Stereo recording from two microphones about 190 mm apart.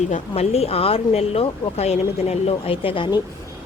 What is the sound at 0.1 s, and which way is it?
A woman's voice, 35° left (ahead or behind).